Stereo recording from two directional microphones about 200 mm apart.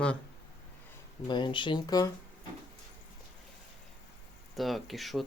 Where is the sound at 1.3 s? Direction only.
25° left (ahead or behind).